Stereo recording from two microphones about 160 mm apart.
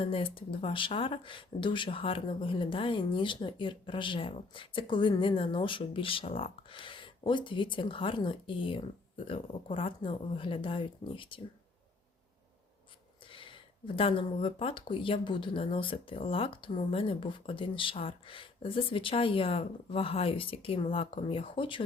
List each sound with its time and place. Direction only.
0.0 s speech: 35° left (ahead or behind)
13.2 s speech: 30° left (ahead or behind)